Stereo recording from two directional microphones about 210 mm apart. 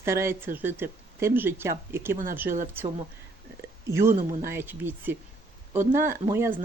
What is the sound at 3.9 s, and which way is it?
Speech, 15° right (ahead or behind).